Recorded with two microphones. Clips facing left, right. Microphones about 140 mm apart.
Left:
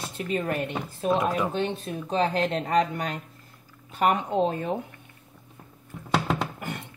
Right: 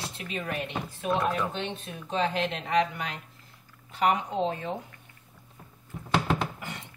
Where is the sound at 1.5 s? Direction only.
40° left (ahead or behind); by 4.7 s 55° left (ahead or behind).